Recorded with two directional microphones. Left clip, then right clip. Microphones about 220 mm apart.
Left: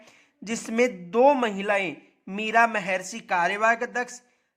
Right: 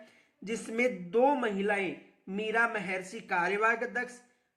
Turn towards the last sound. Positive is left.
turn(degrees=40)  # may be behind; listen again after turning